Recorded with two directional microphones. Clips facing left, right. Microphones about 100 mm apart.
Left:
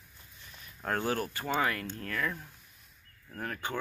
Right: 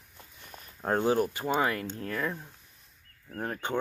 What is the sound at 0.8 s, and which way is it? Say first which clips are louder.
Speech: right 6 dB; 20° right (ahead or behind).